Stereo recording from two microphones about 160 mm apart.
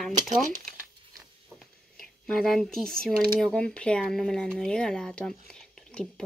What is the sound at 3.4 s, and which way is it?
Speech, 5° left (ahead or behind).